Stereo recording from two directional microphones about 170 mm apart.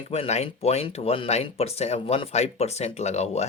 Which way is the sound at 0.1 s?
40° left (ahead or behind).